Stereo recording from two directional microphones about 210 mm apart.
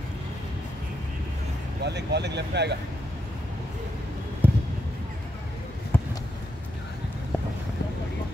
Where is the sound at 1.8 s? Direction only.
55° right (ahead or behind).